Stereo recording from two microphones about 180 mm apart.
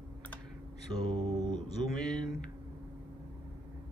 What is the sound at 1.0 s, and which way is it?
Mantra, 20° right (ahead or behind).